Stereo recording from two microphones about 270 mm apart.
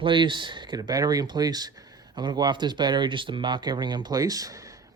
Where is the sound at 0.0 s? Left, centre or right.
Centre.